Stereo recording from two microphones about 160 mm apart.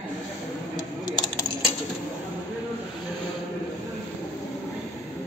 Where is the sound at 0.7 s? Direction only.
25° left (ahead or behind).